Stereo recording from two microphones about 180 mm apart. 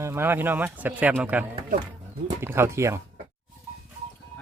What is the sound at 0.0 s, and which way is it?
Speech, 15° right (ahead or behind).